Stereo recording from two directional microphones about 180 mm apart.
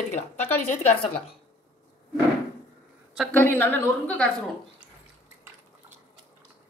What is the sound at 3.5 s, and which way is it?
Speech, 10° left (ahead or behind).